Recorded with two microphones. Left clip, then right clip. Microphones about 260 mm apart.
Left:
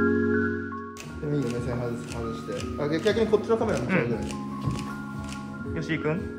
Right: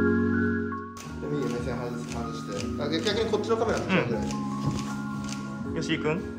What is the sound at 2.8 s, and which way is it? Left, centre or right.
Speech, left.